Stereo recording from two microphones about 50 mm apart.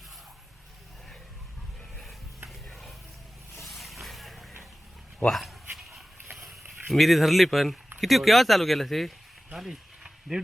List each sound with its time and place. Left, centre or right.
2.6 s a sound: centre
3.7 s vehicle: centre
5.3 s speech: centre
5.7 s a sound: centre
6.8 s speech: centre
9.5 s speech: centre